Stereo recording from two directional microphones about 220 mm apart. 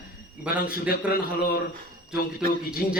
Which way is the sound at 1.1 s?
45° left (ahead or behind).